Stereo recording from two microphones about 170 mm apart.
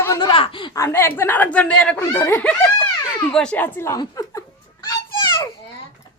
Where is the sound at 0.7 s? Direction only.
15° left (ahead or behind).